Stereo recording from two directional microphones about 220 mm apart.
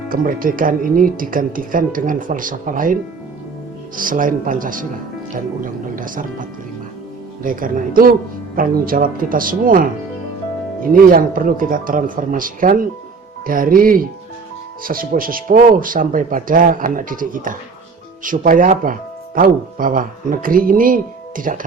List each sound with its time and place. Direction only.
0.1 s speech: 40° right (ahead or behind)
7.4 s speech: 40° right (ahead or behind)
11.1 s speech: 40° right (ahead or behind)